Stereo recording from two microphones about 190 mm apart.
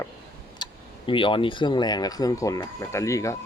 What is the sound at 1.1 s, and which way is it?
Speech, 25° left (ahead or behind).